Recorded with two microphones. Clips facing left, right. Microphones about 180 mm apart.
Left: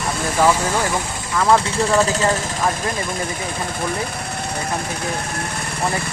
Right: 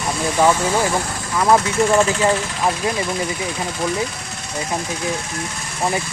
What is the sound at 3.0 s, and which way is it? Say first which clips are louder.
Speech: right 2 dB; 55° left (ahead or behind).